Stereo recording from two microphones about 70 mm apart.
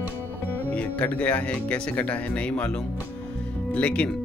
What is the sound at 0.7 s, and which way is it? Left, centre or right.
Speech, left.